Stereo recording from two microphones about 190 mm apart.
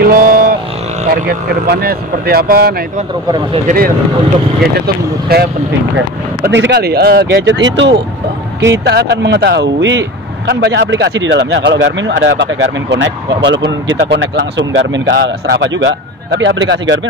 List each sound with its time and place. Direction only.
0.0 s vehicle: 50° right (ahead or behind)
1.1 s speech: 55° right (ahead or behind); by 17.0 s 75° right (ahead or behind)